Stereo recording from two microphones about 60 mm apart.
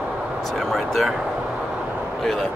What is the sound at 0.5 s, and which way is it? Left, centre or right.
Speech, centre.